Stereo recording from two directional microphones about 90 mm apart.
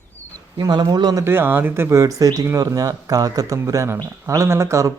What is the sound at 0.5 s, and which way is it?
Speech, 50° right (ahead or behind).